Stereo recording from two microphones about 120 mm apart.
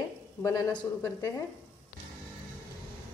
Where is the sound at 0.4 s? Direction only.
25° left (ahead or behind).